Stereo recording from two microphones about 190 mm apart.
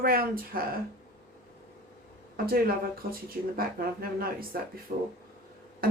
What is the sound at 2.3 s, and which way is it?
Speech, 50° right (ahead or behind).